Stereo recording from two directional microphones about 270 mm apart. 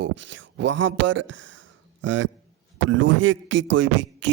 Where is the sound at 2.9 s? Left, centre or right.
Right.